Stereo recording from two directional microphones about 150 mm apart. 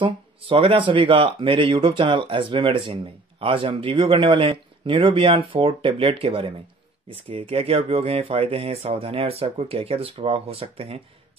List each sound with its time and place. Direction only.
0.0 s speech: 35° right (ahead or behind)